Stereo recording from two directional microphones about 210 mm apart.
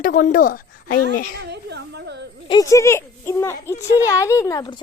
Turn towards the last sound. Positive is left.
turn(degrees=20)  # may be behind; listen again after turning